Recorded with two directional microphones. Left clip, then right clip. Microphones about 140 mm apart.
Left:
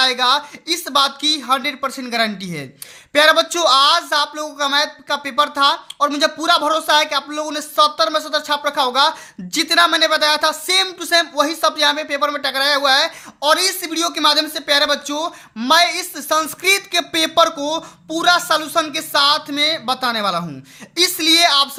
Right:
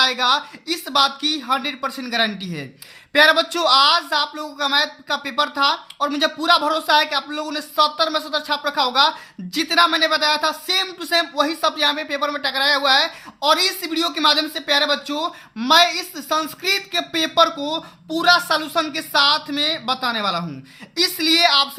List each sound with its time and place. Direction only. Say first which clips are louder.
0.0 s a woman's voice: left 2 dB; 35° left (ahead or behind)
18.1 s a woman's voice: left 1 dB; 30° left (ahead or behind)